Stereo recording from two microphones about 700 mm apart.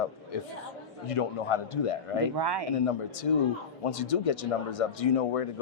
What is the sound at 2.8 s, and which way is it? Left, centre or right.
Speech, left.